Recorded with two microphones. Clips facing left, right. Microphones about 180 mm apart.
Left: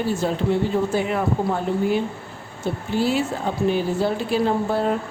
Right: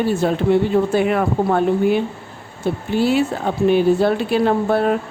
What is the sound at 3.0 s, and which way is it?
Speech, 65° right (ahead or behind).